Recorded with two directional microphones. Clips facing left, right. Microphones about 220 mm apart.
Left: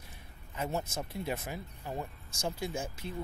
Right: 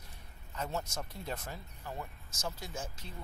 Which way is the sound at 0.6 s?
10° left (ahead or behind).